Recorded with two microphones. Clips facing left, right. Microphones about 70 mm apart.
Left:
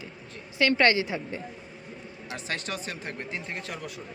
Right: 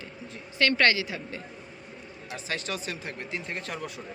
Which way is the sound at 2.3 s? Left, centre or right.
Left.